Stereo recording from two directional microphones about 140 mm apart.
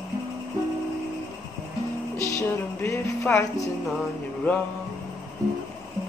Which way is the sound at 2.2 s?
20° left (ahead or behind).